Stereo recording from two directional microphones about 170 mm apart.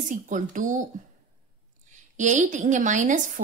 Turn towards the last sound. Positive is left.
turn(degrees=-45)  # may be behind; listen again after turning